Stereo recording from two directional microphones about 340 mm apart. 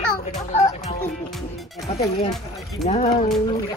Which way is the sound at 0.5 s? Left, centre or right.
Centre.